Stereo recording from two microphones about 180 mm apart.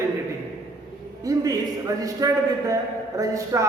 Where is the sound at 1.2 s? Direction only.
20° right (ahead or behind).